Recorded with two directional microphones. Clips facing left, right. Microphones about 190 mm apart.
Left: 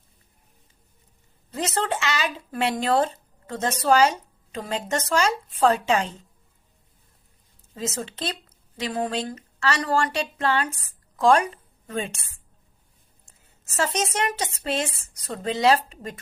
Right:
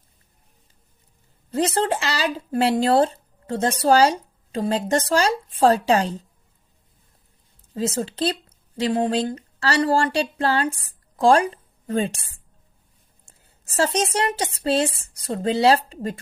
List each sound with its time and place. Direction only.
1.5 s speech: 30° right (ahead or behind)
7.7 s speech: 35° right (ahead or behind)
13.7 s speech: 35° right (ahead or behind)